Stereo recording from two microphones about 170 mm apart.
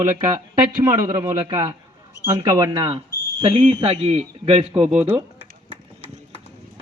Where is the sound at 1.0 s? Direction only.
20° right (ahead or behind).